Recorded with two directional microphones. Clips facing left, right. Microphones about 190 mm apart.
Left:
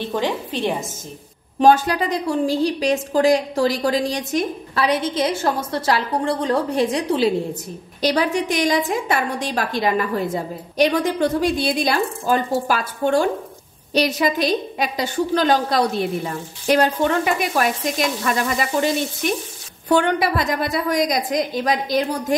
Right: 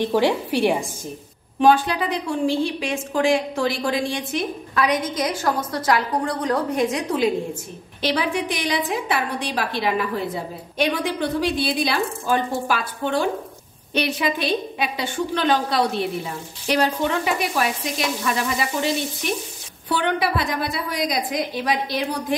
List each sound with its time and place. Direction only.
0.0 s a woman's voice: 10° right (ahead or behind)
1.6 s a woman's voice: 45° left (ahead or behind)
8.0 s a woman's voice: 40° left (ahead or behind)
19.9 s a woman's voice: 45° left (ahead or behind)